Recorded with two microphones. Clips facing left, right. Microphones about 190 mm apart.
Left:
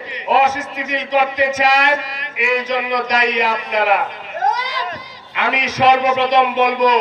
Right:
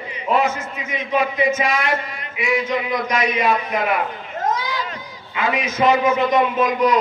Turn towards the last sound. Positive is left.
turn(degrees=90)